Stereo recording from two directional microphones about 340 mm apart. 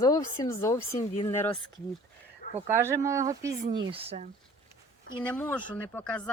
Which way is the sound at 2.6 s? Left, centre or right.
Centre.